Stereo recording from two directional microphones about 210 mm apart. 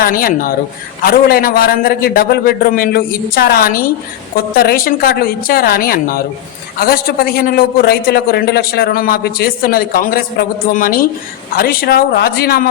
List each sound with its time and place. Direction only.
0.0 s a man's voice: 45° left (ahead or behind)